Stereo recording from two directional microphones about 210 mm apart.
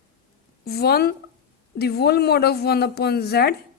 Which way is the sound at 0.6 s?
50° left (ahead or behind).